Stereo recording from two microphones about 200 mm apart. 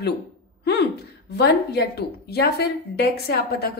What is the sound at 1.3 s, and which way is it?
A woman's voice, 55° left (ahead or behind).